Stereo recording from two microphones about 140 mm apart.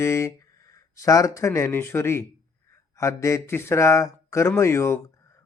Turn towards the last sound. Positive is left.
turn(degrees=20)  # may be behind; listen again after turning